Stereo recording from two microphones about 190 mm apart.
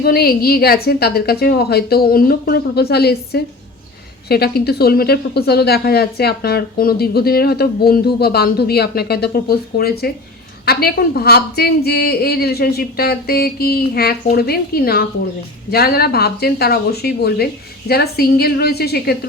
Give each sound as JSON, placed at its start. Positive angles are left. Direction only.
{"t": 0.0, "sound": "speech", "side_deg": 55}